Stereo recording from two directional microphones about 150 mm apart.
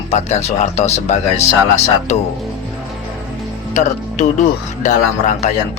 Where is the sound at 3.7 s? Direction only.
55° left (ahead or behind).